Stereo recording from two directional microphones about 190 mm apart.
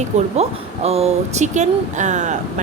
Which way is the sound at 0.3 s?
35° right (ahead or behind).